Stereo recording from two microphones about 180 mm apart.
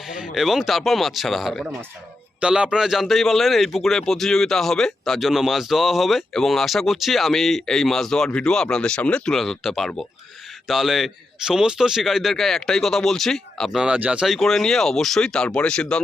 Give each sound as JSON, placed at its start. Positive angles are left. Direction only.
{"t": 0.3, "sound": "a man's voice", "side_deg": 0}